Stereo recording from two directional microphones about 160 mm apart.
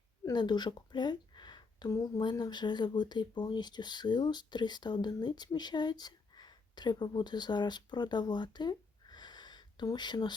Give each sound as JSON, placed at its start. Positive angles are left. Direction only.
{"t": 0.3, "sound": "a woman's voice", "side_deg": 25}